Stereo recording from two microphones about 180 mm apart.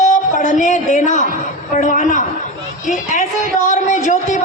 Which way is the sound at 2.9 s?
45° left (ahead or behind).